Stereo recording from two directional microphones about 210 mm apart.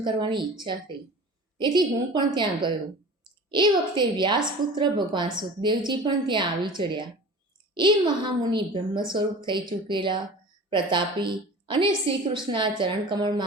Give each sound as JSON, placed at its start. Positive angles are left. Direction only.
{"t": 0.0, "sound": "a woman's voice", "side_deg": -20}